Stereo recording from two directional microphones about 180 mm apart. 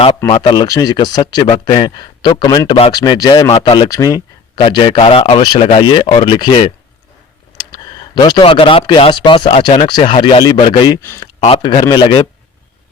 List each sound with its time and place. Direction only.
0.2 s speech: 25° left (ahead or behind)
8.1 s speech: 25° left (ahead or behind)
11.0 s speech: 15° left (ahead or behind)
11.4 s speech: 30° left (ahead or behind)